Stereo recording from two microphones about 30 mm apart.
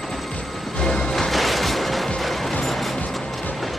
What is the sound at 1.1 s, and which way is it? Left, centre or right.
Music, centre.